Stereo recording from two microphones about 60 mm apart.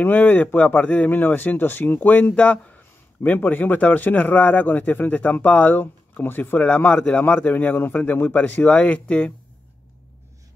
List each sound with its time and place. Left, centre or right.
0.0 s speech: left
2.3 s speech: left